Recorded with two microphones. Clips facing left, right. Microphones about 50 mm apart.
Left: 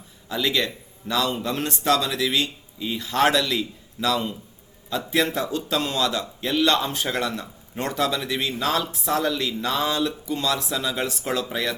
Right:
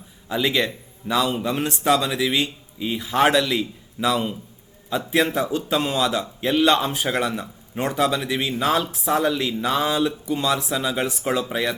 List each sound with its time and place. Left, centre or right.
0.3 s a man's voice: centre